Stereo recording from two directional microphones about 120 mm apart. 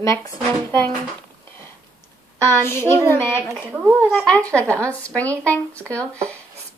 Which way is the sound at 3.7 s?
10° right (ahead or behind).